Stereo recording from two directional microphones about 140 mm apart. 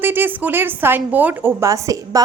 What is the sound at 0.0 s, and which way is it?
A woman's voice, 15° right (ahead or behind).